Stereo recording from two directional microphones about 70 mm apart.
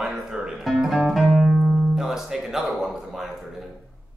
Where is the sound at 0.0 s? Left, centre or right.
Centre.